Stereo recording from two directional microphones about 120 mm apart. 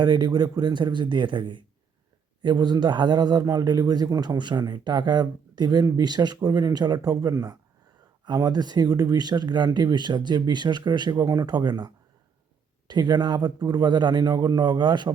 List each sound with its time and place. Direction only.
0.0 s a man's voice: 35° right (ahead or behind)
12.9 s a man's voice: 35° right (ahead or behind)